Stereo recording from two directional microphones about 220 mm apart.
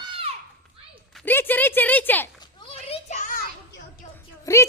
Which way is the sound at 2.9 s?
30° left (ahead or behind).